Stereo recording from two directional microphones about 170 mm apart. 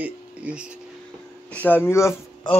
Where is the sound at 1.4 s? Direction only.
10° left (ahead or behind).